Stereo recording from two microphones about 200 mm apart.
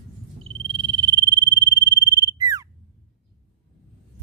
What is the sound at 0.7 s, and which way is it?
Frog, 25° right (ahead or behind).